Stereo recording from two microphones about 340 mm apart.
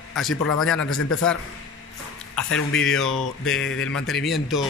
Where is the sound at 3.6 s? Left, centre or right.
Left.